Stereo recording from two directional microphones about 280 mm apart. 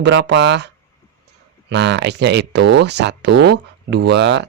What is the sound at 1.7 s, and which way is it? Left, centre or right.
Speech, right.